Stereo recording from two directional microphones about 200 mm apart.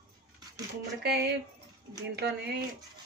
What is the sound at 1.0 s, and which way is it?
Speech, 55° right (ahead or behind).